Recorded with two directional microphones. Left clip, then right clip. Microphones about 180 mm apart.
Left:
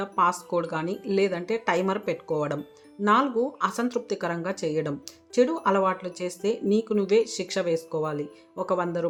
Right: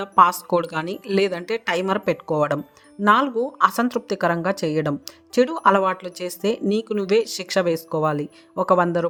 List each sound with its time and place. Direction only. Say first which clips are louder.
0.0 s speech: right 8 dB; 45° right (ahead or behind)